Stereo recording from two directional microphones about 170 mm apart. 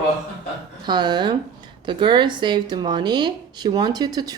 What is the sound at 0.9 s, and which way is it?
Speech, 25° right (ahead or behind).